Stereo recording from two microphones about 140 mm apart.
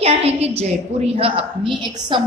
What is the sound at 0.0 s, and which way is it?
A woman's voice, 45° right (ahead or behind).